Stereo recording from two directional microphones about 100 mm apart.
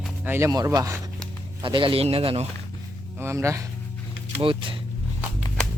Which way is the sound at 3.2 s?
25° right (ahead or behind).